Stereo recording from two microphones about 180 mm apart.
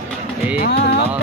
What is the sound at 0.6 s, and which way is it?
Music, 65° left (ahead or behind).